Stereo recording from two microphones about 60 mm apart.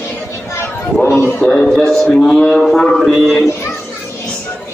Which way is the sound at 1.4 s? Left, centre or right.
Centre.